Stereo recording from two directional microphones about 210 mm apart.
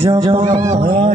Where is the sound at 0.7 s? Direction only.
35° right (ahead or behind).